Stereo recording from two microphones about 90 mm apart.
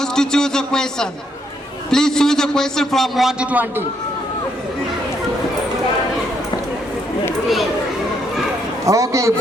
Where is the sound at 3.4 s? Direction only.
15° right (ahead or behind).